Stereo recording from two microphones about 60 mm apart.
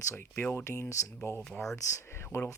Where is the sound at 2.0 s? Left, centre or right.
Left.